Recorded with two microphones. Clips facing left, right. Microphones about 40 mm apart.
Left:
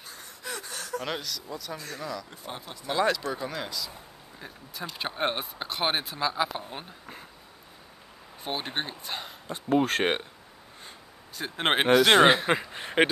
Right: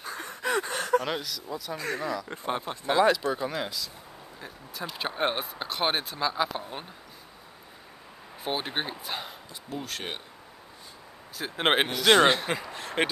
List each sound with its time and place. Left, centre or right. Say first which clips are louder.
0.0 s a sound: right 9 dB; right
1.0 s speech: right 1 dB; centre
2.2 s speech: right 8 dB; right
3.0 s speech: right 3 dB; centre
8.4 s speech: right 1 dB; centre
9.5 s speech: left 15 dB; left
11.3 s speech: right 1 dB; centre
11.9 s speech: left 4 dB; centre